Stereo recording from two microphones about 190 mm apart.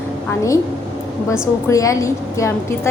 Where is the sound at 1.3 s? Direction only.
15° left (ahead or behind).